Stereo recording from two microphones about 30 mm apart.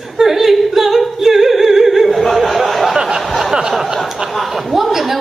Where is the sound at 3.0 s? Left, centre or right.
Centre.